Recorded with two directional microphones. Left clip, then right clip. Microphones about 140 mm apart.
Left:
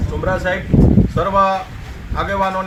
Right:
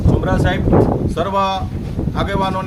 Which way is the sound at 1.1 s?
40° right (ahead or behind).